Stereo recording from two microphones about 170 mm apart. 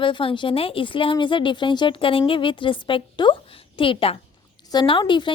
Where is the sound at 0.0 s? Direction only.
30° left (ahead or behind).